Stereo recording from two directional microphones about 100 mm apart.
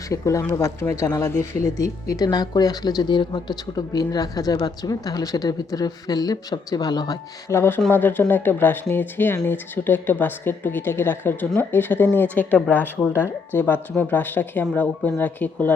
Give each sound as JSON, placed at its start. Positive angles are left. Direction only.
{"t": 0.1, "sound": "speech", "side_deg": 30}
{"t": 7.5, "sound": "speech", "side_deg": 25}